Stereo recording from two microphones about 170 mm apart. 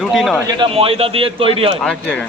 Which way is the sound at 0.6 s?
35° right (ahead or behind).